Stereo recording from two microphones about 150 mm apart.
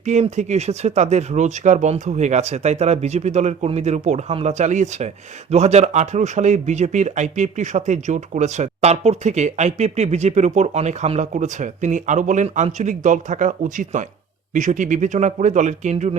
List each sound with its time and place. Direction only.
0.0 s a man's voice: 50° right (ahead or behind)